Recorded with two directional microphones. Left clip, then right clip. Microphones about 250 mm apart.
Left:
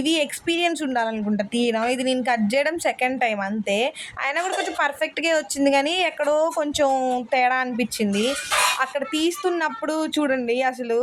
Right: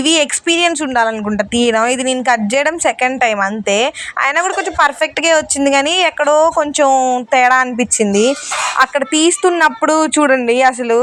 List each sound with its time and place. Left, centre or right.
0.0 s speech: centre